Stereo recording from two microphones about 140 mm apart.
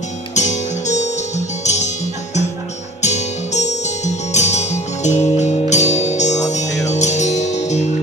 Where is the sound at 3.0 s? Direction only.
55° left (ahead or behind).